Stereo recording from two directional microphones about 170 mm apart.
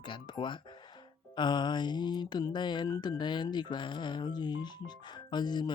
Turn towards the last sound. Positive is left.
turn(degrees=25)  # may be behind; listen again after turning